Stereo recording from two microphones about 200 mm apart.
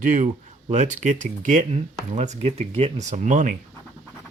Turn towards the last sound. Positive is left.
turn(degrees=-40)  # may be behind; listen again after turning